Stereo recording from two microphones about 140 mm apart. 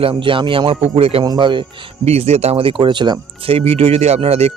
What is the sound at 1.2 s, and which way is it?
Speech, 30° right (ahead or behind).